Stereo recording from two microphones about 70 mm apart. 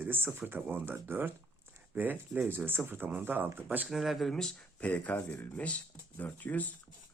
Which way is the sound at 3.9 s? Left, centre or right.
Centre.